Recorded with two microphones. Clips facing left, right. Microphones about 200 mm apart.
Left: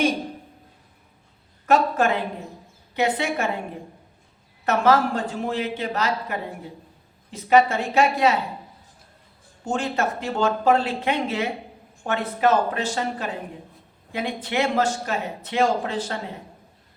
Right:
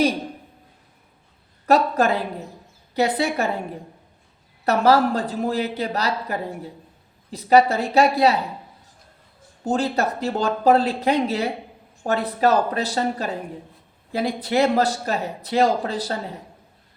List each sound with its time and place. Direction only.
1.6 s speech: 35° right (ahead or behind)
4.6 s speech: 35° right (ahead or behind)
9.6 s speech: 35° right (ahead or behind)